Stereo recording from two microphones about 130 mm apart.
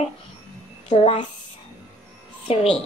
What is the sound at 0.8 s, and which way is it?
Speech, 60° left (ahead or behind).